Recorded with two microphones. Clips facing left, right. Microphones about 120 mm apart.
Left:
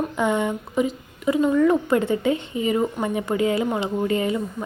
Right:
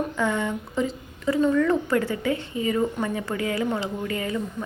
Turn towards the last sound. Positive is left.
turn(degrees=20)  # may be behind; listen again after turning